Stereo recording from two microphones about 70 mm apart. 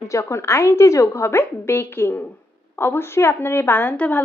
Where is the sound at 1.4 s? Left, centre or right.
Left.